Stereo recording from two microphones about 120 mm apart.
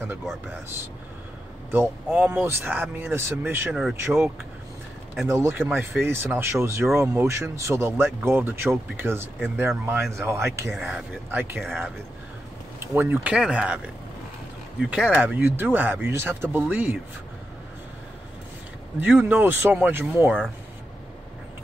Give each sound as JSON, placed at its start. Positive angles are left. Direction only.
{"t": 1.7, "sound": "speech", "side_deg": -15}
{"t": 5.3, "sound": "speech", "side_deg": -20}
{"t": 10.8, "sound": "speech", "side_deg": -5}
{"t": 11.2, "sound": "speech", "side_deg": -15}
{"t": 11.6, "sound": "speech", "side_deg": 5}
{"t": 12.8, "sound": "speech", "side_deg": -15}
{"t": 14.8, "sound": "speech", "side_deg": -5}
{"t": 18.9, "sound": "speech", "side_deg": -15}